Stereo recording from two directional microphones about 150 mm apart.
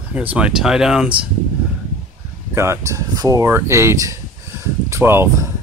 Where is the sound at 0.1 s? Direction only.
10° right (ahead or behind).